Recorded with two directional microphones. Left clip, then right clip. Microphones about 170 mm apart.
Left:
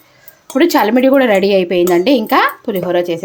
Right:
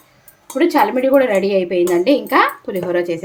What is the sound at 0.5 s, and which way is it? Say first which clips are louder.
Speech: left 3 dB; 55° left (ahead or behind).